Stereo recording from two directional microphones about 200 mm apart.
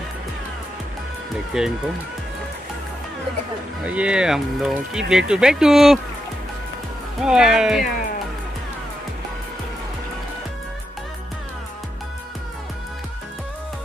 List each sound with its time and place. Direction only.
1.5 s speech: 5° right (ahead or behind)
3.9 s speech: 5° right (ahead or behind)
7.2 s speech: 5° right (ahead or behind)